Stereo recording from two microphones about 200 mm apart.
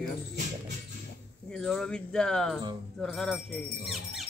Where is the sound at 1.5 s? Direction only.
Centre (ahead or behind).